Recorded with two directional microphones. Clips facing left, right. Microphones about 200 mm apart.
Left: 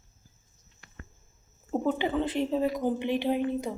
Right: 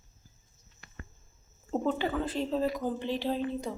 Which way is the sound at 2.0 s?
20° left (ahead or behind).